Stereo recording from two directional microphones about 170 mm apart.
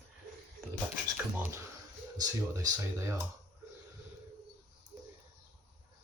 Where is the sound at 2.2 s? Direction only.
15° right (ahead or behind).